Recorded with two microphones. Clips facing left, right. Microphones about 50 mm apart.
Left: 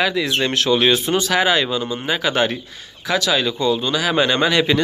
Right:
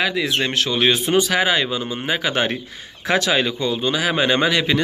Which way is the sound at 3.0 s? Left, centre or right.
Right.